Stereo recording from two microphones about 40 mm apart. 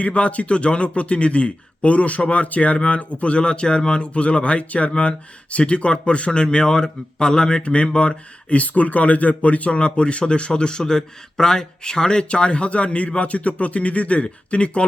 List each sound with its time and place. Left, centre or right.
0.0 s a man's voice: left